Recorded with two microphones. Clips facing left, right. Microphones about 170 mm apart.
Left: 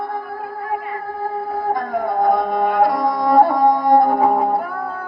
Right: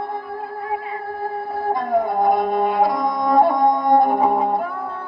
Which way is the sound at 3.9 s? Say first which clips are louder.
Left 1 dB; 20° right (ahead or behind).